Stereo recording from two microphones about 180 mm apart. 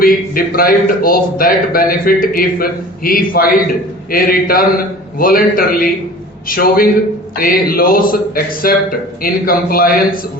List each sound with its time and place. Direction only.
0.0 s a man's voice: 55° left (ahead or behind)